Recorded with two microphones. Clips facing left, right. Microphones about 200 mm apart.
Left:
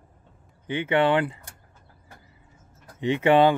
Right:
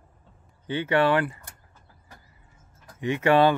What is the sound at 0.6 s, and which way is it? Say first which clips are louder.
Speech: even; 15° left (ahead or behind).